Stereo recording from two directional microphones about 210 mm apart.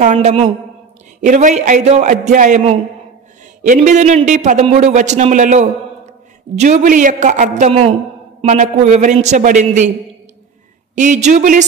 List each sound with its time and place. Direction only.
0.0 s a man's voice: 35° right (ahead or behind)
11.0 s a man's voice: 35° right (ahead or behind)